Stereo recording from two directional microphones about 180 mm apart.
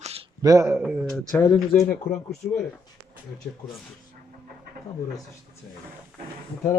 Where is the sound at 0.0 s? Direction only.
35° right (ahead or behind).